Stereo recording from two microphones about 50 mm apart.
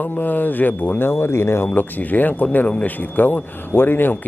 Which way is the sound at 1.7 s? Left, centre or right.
Left.